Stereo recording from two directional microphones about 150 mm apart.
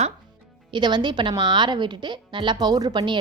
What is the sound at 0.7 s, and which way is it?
A woman's voice, 30° right (ahead or behind).